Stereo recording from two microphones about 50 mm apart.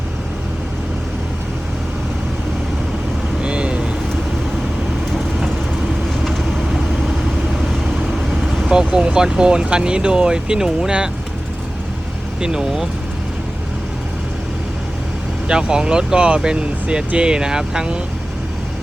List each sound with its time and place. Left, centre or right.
3.4 s vehicle: centre
8.1 s vehicle: centre
8.7 s speech: centre
12.4 s speech: centre
15.4 s speech: centre